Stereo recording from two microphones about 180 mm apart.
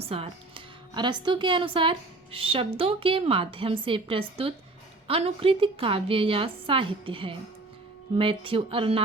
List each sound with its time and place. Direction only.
0.0 s a woman's voice: 35° right (ahead or behind)